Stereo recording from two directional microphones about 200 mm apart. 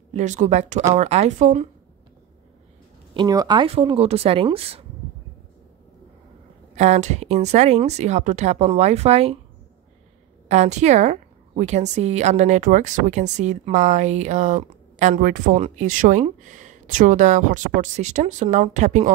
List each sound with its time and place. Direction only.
0.1 s a woman's voice: 35° right (ahead or behind)
3.2 s speech: 20° right (ahead or behind)
6.7 s a woman's voice: 35° right (ahead or behind)
10.5 s a woman's voice: 35° right (ahead or behind)